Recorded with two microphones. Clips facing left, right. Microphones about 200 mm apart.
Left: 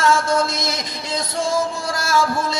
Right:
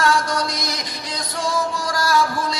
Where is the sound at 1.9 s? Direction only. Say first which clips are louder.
Right 2 dB; 25° left (ahead or behind).